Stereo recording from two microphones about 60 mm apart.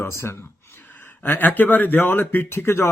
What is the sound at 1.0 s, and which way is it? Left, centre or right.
Speech, left.